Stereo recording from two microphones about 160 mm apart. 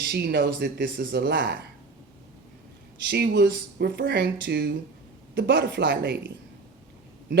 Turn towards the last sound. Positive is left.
turn(degrees=-90)